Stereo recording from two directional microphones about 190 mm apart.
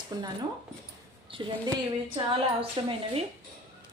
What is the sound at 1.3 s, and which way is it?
Speech, 25° right (ahead or behind).